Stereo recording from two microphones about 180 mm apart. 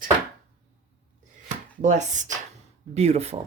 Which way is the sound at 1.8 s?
45° right (ahead or behind).